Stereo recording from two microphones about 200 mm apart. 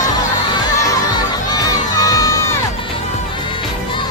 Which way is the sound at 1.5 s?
20° left (ahead or behind).